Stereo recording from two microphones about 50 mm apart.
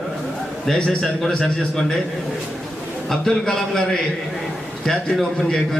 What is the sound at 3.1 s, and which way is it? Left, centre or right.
Speech, centre.